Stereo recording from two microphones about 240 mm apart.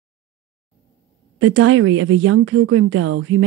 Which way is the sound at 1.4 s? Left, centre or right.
Right.